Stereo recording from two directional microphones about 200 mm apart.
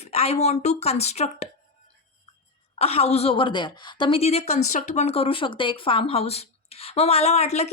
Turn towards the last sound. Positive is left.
turn(degrees=30)  # may be behind; listen again after turning